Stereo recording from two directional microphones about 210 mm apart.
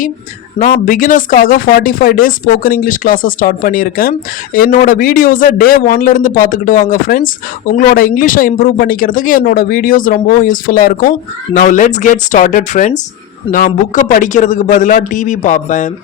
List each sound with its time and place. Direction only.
0.6 s speech: 40° left (ahead or behind)